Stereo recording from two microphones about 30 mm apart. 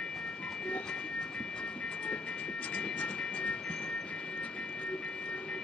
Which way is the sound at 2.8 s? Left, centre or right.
Left.